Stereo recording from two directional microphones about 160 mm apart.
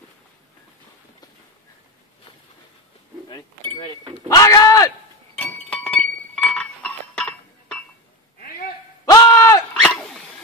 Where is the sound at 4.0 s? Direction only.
25° right (ahead or behind).